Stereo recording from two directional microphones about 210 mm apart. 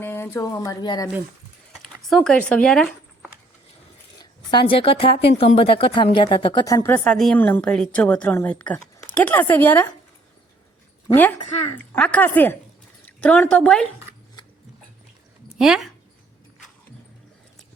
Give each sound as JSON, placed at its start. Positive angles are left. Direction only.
{"t": 0.0, "sound": "speech", "side_deg": 10}
{"t": 1.7, "sound": "speech", "side_deg": 0}
{"t": 4.2, "sound": "speech", "side_deg": 25}
{"t": 11.1, "sound": "a woman's voice", "side_deg": 10}
{"t": 15.5, "sound": "speech", "side_deg": 0}